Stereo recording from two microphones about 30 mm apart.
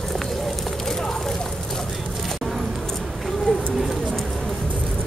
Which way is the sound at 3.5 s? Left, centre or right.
Left.